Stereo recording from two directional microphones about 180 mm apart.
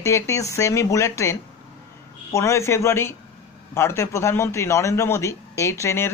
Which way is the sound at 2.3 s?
15° left (ahead or behind).